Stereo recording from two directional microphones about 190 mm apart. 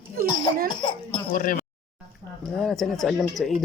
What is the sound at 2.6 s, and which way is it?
Speech, centre (ahead or behind).